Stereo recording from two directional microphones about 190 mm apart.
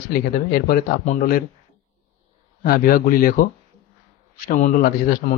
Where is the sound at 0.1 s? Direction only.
50° left (ahead or behind).